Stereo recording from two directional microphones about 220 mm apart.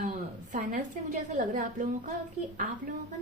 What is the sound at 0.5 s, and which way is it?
A woman's voice, 35° right (ahead or behind).